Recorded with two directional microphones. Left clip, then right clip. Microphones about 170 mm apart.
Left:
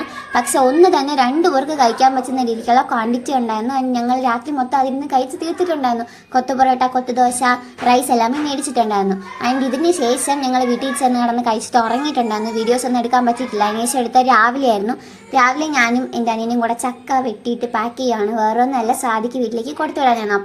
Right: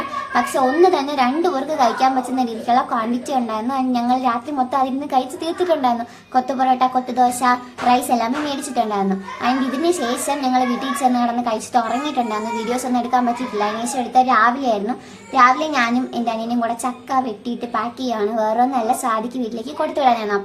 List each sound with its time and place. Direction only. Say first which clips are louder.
0.3 s a woman's voice: left 4 dB; 30° left (ahead or behind)